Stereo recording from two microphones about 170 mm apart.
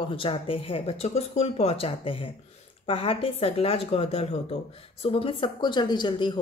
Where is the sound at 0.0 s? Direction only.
30° left (ahead or behind).